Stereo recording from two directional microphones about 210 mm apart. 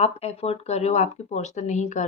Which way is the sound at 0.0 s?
30° left (ahead or behind).